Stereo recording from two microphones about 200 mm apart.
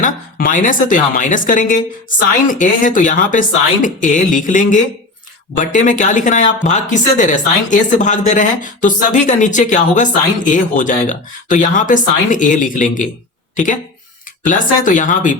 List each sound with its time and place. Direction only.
0.0 s speech: 45° left (ahead or behind)
14.4 s speech: 40° left (ahead or behind)